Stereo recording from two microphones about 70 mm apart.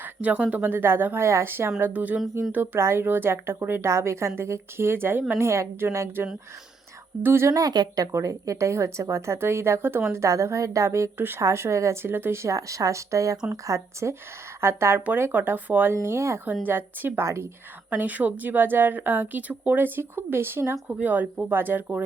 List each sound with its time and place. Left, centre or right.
0.0 s a sound: right
0.5 s a woman's voice: right
1.9 s a woman's voice: right
2.7 s a woman's voice: right
7.4 s speech: right
7.7 s speech: right
8.1 s a woman's voice: right
12.5 s a woman's voice: right
15.9 s a woman's voice: right
16.6 s a woman's voice: right
17.2 s speech: right
17.9 s a woman's voice: right